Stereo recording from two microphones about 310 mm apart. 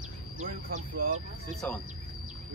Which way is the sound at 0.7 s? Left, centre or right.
Right.